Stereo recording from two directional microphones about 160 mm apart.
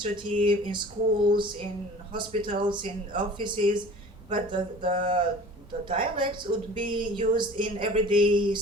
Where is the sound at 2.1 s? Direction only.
30° right (ahead or behind).